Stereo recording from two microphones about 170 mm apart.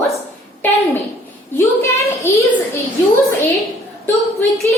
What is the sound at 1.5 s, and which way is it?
Speech, 15° left (ahead or behind).